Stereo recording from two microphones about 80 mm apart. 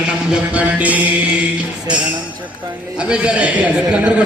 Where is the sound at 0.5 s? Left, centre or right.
Centre.